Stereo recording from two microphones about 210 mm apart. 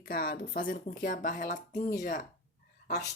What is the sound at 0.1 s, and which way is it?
Speech, 45° left (ahead or behind).